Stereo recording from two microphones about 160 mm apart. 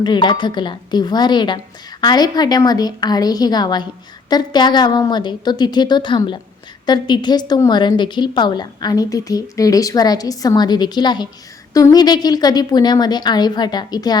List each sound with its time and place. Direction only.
0.0 s a woman's voice: 30° left (ahead or behind)